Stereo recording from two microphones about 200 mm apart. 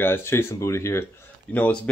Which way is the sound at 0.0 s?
10° left (ahead or behind).